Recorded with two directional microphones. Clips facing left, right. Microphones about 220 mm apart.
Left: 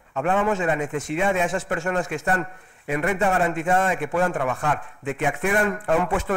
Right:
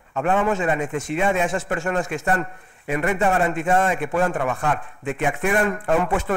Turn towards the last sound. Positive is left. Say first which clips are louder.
# right 1 dB
turn(degrees=-25)  # may be behind; listen again after turning